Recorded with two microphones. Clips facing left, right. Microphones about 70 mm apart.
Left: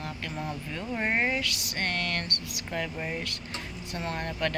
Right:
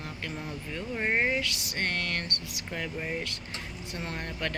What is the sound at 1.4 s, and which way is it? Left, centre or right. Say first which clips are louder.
Speech: even; right.